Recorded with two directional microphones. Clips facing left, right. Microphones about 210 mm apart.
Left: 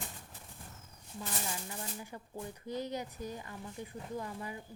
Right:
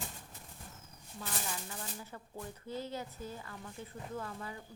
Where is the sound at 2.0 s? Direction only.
15° left (ahead or behind).